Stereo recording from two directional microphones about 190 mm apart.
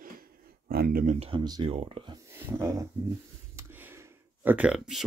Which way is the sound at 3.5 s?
10° right (ahead or behind).